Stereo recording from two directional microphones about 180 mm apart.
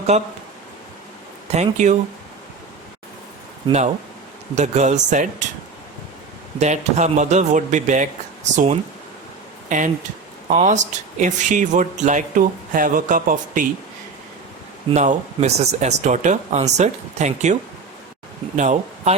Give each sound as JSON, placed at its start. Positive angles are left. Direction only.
{"t": 0.1, "sound": "speech", "side_deg": -40}
{"t": 1.5, "sound": "speech", "side_deg": -40}
{"t": 4.5, "sound": "speech", "side_deg": -40}
{"t": 6.6, "sound": "speech", "side_deg": -40}
{"t": 14.9, "sound": "speech", "side_deg": -40}